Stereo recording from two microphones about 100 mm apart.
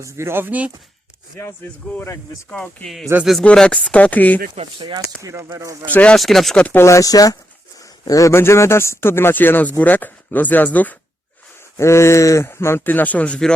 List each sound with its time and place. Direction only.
0.0 s speech: 25° right (ahead or behind)
2.0 s a man's voice: 30° left (ahead or behind)
2.8 s speech: centre (ahead or behind)
4.8 s speech: 45° right (ahead or behind)
5.3 s speech: 25° right (ahead or behind)
5.9 s speech: 15° left (ahead or behind)
6.1 s speech: centre (ahead or behind)
6.8 s a man's voice: 35° left (ahead or behind); by 10.9 s 15° left (ahead or behind)
11.8 s a man's voice: 30° left (ahead or behind); by 13.5 s 10° left (ahead or behind)